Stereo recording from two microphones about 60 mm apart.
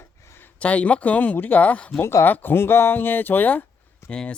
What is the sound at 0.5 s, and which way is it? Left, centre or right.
Speech, left.